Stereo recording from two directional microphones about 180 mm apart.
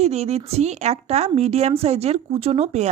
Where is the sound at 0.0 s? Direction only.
35° right (ahead or behind).